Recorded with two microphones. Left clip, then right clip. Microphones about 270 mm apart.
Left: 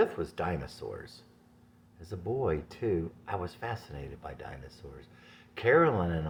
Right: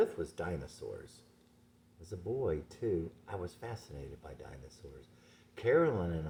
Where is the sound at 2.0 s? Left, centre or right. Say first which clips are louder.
Left 4 dB; left.